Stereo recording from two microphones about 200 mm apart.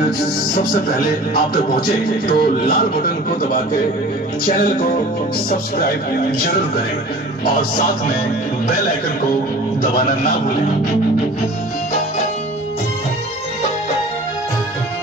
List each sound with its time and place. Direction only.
0.9 s a man's voice: 45° left (ahead or behind)
4.5 s a man's voice: 45° left (ahead or behind)